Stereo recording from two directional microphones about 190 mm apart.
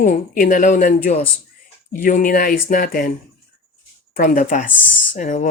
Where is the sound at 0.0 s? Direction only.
45° left (ahead or behind).